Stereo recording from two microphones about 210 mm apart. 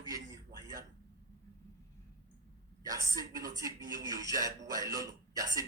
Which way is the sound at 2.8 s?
15° right (ahead or behind).